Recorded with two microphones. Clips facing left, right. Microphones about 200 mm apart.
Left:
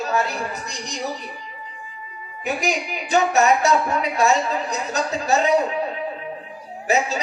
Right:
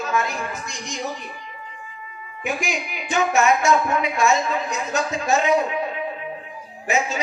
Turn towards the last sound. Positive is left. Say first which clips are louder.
# left 2 dB
turn(degrees=35)  # may be behind; listen again after turning